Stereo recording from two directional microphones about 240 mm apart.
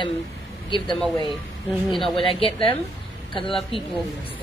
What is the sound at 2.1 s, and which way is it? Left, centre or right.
Speech, left.